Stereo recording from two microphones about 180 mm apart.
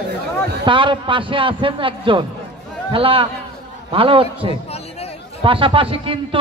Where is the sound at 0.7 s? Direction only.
30° right (ahead or behind).